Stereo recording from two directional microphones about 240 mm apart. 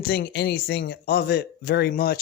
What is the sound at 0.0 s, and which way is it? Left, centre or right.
Speech, left.